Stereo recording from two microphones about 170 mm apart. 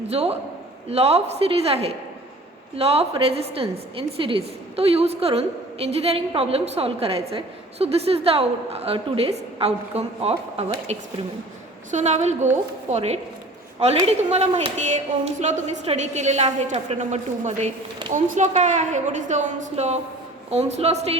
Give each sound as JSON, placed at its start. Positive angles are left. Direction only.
{"t": 0.1, "sound": "a woman's voice", "side_deg": -35}
{"t": 14.3, "sound": "a woman's voice", "side_deg": -40}